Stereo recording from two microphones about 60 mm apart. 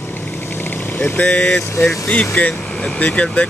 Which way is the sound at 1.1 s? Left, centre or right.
Centre.